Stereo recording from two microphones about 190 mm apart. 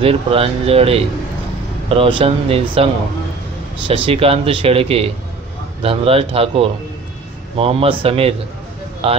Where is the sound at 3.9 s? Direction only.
30° right (ahead or behind).